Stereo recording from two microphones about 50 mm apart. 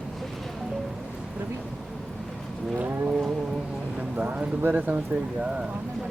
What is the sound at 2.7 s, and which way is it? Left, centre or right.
Wild animals, right.